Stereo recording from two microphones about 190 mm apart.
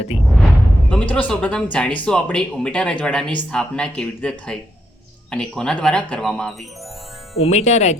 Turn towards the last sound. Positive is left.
turn(degrees=35)  # may be behind; listen again after turning